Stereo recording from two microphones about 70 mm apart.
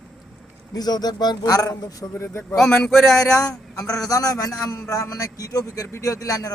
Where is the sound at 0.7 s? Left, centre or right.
Left.